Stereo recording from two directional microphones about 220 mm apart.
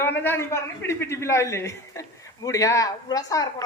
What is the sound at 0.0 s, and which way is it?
A man's voice, 10° left (ahead or behind).